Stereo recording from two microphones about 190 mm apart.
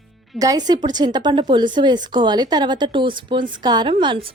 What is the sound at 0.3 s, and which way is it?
A woman's voice, 20° right (ahead or behind).